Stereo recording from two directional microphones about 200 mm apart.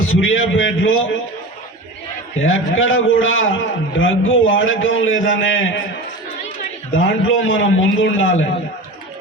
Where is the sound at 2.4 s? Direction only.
75° left (ahead or behind).